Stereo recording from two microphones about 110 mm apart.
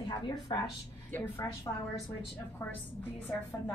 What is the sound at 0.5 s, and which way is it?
Speech, 40° left (ahead or behind).